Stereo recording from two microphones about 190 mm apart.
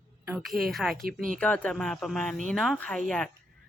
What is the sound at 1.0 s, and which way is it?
Speech, 50° right (ahead or behind).